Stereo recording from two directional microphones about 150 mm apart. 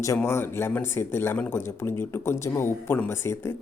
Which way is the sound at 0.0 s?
20° left (ahead or behind).